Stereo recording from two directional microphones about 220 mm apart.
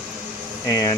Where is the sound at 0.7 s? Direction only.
15° left (ahead or behind).